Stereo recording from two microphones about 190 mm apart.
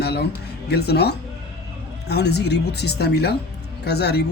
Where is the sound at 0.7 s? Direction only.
60° left (ahead or behind).